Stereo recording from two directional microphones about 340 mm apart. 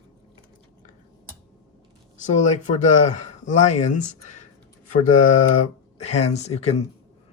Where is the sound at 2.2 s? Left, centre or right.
Left.